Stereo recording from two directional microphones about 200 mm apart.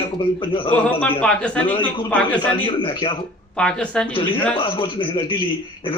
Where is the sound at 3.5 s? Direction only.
5° left (ahead or behind).